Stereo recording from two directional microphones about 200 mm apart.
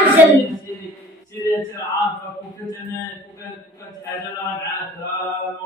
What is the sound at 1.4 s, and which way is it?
Male singing, 15° left (ahead or behind).